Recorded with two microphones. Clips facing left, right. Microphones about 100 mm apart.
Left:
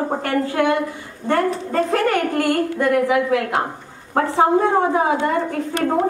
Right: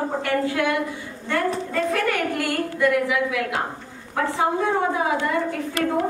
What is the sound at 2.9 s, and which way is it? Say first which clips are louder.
A woman's voice: left 5 dB; 40° left (ahead or behind).